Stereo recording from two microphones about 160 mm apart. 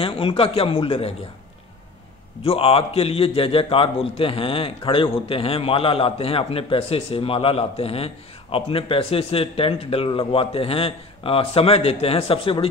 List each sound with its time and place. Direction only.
0.0 s a man's voice: 35° left (ahead or behind)
2.4 s a man's voice: 35° left (ahead or behind)